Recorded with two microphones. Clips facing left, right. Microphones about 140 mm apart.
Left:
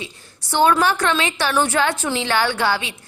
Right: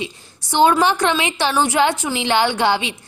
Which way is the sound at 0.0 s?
20° right (ahead or behind).